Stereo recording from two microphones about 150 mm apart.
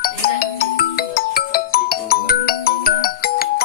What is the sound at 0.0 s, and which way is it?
Ringtone, 90° left.